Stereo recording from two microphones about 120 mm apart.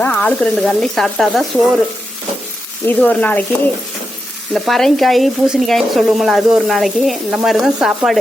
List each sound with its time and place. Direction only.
0.0 s speech: 10° left (ahead or behind)
2.8 s speech: 10° left (ahead or behind)
4.5 s speech: centre (ahead or behind)